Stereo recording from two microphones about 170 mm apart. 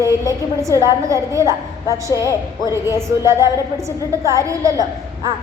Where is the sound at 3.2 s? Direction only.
15° right (ahead or behind).